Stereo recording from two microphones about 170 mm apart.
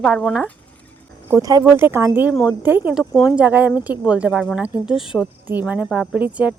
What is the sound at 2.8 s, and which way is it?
Speech, centre (ahead or behind).